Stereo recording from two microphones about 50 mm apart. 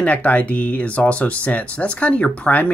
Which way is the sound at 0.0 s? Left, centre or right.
Left.